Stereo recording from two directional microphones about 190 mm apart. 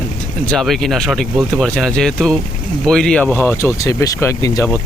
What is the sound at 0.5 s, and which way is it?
Speech, centre (ahead or behind).